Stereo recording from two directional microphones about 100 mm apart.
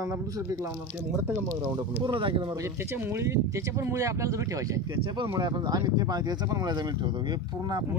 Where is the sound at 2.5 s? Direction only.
30° right (ahead or behind).